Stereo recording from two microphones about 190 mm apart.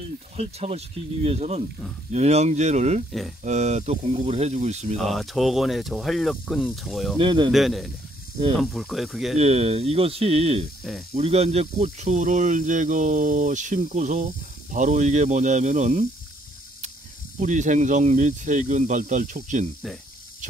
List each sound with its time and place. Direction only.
0.4 s speech: 35° right (ahead or behind)
3.1 s speech: centre (ahead or behind)
3.4 s speech: 35° right (ahead or behind)
4.9 s speech: centre (ahead or behind)
7.2 s speech: 25° right (ahead or behind)
7.5 s speech: centre (ahead or behind)
9.4 s speech: 35° right (ahead or behind)
10.8 s speech: centre (ahead or behind)
11.1 s speech: 35° right (ahead or behind)
17.4 s speech: 40° right (ahead or behind)